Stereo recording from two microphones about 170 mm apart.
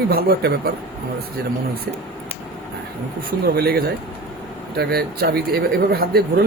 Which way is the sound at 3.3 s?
65° right (ahead or behind).